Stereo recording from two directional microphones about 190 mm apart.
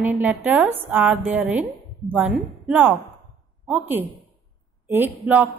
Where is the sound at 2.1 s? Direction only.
5° right (ahead or behind).